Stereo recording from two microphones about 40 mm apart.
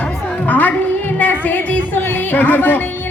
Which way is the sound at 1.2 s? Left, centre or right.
Left.